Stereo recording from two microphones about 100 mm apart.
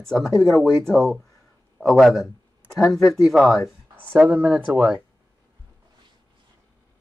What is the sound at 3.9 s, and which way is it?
Speech, 20° right (ahead or behind).